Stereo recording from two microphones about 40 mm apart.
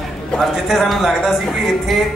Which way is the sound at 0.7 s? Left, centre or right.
Centre.